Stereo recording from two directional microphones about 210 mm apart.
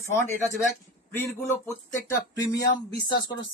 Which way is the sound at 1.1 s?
10° left (ahead or behind).